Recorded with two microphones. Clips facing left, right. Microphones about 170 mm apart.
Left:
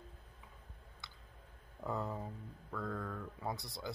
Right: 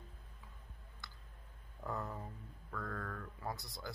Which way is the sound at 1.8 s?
20° left (ahead or behind).